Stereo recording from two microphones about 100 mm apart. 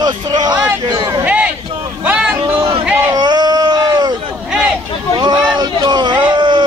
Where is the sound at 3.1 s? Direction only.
45° right (ahead or behind).